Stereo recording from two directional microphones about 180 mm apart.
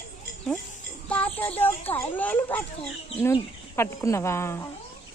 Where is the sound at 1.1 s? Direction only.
10° left (ahead or behind).